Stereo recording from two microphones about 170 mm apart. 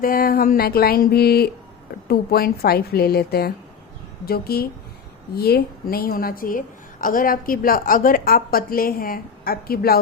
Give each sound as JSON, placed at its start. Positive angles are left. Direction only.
{"t": 0.0, "sound": "a woman's voice", "side_deg": 55}